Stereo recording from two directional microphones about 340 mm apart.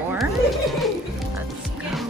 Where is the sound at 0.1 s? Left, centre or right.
Centre.